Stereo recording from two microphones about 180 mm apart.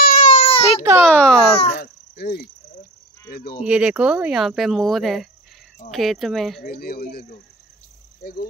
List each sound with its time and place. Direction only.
0.0 s baby cry: 45° left (ahead or behind)
0.5 s a sound: 35° left (ahead or behind)
1.0 s a sound: 5° left (ahead or behind)
1.5 s speech: 35° left (ahead or behind)
1.8 s cricket: 65° left (ahead or behind)
3.6 s speech: 5° right (ahead or behind)
6.6 s speech: 55° left (ahead or behind)